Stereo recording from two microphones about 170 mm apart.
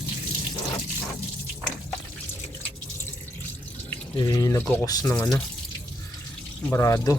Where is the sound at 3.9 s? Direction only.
20° left (ahead or behind).